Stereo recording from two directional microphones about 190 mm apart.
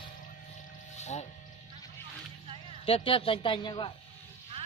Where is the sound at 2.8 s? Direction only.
30° left (ahead or behind).